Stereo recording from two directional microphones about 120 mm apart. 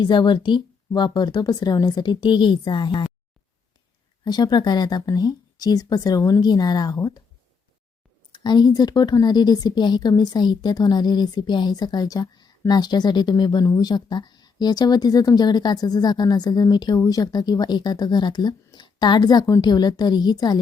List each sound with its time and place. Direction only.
0.0 s a woman's voice: 40° left (ahead or behind)
4.2 s a woman's voice: 35° left (ahead or behind)
8.3 s a woman's voice: 35° left (ahead or behind)